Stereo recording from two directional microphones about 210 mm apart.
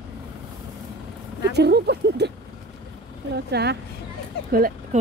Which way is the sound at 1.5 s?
50° right (ahead or behind).